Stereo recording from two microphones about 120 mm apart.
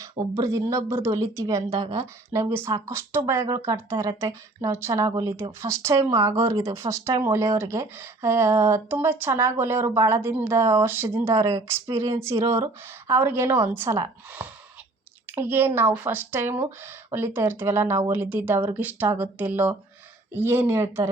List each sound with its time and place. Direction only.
0.0 s speech: 25° right (ahead or behind)
5.0 s speech: 35° right (ahead or behind)
5.4 s speech: 20° right (ahead or behind)